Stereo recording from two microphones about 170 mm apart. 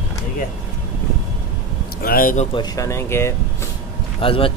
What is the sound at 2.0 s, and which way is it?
Speech, 55° left (ahead or behind).